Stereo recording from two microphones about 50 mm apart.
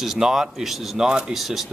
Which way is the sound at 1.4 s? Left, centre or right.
Centre.